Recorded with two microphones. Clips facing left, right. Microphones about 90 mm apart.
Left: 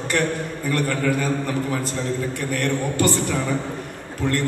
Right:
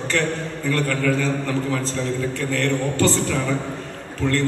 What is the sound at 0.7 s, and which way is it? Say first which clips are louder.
Speech: right 1 dB; 20° left (ahead or behind).